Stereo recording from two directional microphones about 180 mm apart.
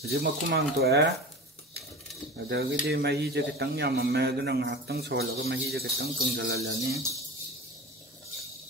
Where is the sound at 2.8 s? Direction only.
65° right (ahead or behind).